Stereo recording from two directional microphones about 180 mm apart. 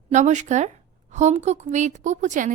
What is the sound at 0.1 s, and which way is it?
A woman's voice, 40° right (ahead or behind).